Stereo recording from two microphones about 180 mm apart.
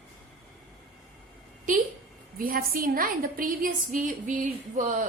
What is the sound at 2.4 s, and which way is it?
A woman's voice, 50° right (ahead or behind).